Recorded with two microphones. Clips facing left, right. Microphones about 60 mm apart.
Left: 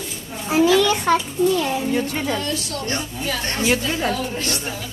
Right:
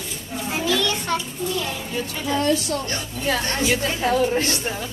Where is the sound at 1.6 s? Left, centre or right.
Left.